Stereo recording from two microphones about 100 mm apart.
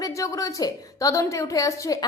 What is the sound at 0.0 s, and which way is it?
A woman's voice, 35° left (ahead or behind).